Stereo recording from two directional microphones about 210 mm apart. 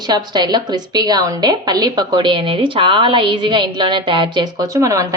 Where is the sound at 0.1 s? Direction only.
20° right (ahead or behind).